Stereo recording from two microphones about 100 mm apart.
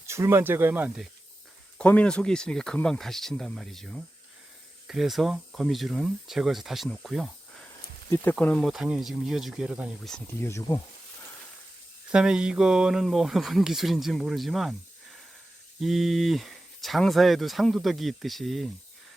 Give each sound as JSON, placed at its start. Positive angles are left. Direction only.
{"t": 0.0, "sound": "speech", "side_deg": -25}
{"t": 1.8, "sound": "speech", "side_deg": 15}
{"t": 8.1, "sound": "speech", "side_deg": 20}
{"t": 8.6, "sound": "speech", "side_deg": -5}
{"t": 10.0, "sound": "speech", "side_deg": 5}
{"t": 10.4, "sound": "speech", "side_deg": 30}
{"t": 12.1, "sound": "speech", "side_deg": -10}